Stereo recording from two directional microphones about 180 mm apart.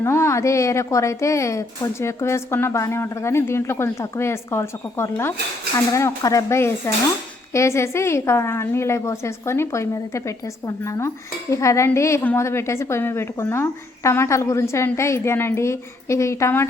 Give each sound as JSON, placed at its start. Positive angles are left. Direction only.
{"t": 0.0, "sound": "a woman's voice", "side_deg": 15}